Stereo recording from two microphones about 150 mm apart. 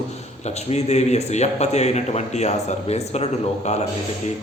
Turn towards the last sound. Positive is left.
turn(degrees=45)  # may be behind; listen again after turning